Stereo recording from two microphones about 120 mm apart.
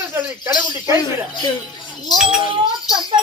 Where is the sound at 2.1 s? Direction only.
5° right (ahead or behind).